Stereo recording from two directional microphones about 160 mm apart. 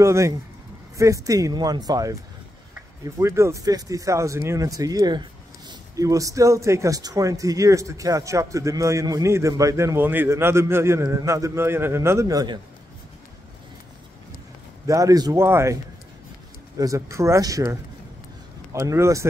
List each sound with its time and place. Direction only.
0.0 s speech: 20° right (ahead or behind)
3.2 s speech: 15° right (ahead or behind)
14.9 s speech: 20° right (ahead or behind)